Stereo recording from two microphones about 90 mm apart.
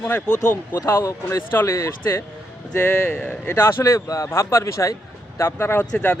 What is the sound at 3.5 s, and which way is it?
Speech, 25° left (ahead or behind).